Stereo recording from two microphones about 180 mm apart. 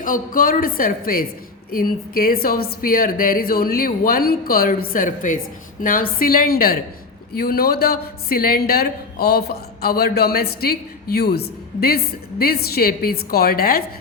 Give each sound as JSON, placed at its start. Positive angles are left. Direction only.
{"t": 0.0, "sound": "a woman's voice", "side_deg": 50}